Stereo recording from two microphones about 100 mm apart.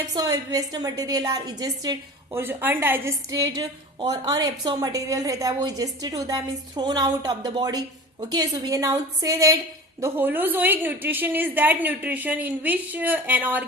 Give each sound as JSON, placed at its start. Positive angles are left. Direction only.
{"t": 0.1, "sound": "a woman's voice", "side_deg": -40}
{"t": 2.3, "sound": "a woman's voice", "side_deg": -20}
{"t": 3.2, "sound": "a woman's voice", "side_deg": -35}
{"t": 10.2, "sound": "a woman's voice", "side_deg": -20}